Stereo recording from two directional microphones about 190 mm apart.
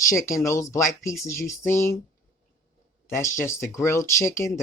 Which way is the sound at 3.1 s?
15° left (ahead or behind).